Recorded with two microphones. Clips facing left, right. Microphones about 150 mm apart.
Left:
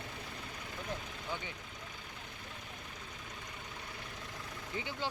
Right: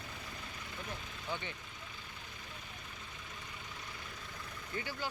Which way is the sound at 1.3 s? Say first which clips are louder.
Right 1 dB; 10° left (ahead or behind).